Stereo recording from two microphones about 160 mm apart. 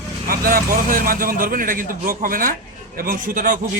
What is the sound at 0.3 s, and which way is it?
A man's voice, 65° right (ahead or behind).